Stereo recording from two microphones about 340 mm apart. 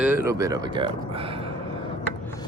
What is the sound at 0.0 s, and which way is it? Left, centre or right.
Speech, centre.